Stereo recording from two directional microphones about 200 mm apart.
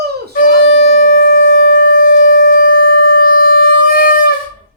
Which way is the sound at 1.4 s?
70° left (ahead or behind).